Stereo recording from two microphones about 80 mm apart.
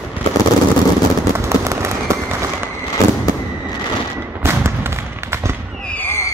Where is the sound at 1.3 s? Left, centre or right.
Right.